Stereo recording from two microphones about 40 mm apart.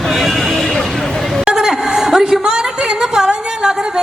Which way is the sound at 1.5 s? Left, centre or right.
Centre.